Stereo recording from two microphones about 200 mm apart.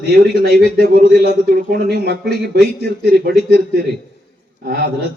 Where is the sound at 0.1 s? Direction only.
50° right (ahead or behind).